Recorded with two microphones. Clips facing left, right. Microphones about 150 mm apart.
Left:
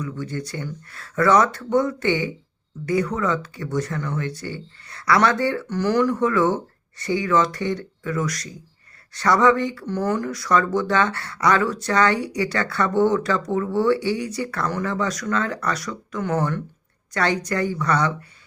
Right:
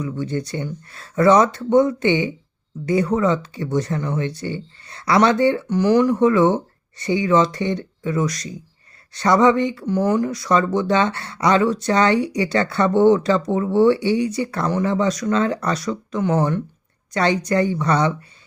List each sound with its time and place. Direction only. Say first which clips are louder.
0.0 s speech: right 4 dB; 25° right (ahead or behind)